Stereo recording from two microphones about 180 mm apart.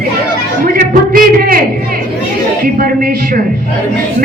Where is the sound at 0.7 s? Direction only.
50° right (ahead or behind).